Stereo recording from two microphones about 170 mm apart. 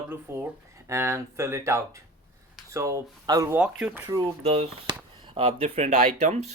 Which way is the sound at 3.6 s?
5° right (ahead or behind).